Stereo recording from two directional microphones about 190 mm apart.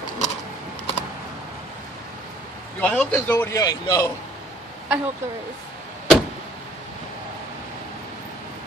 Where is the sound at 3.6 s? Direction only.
20° left (ahead or behind).